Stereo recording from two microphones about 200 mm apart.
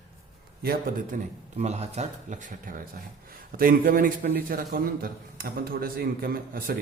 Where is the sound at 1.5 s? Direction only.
35° right (ahead or behind).